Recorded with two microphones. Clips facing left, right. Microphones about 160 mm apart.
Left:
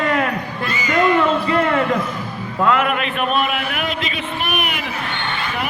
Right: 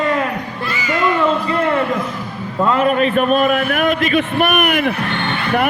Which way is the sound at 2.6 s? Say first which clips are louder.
Right 3 dB; 35° right (ahead or behind).